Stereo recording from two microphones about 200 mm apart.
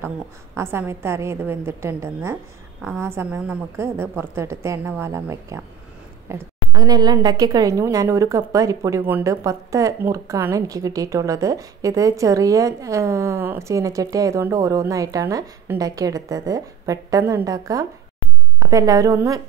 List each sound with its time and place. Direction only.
0.6 s a woman's voice: 10° right (ahead or behind)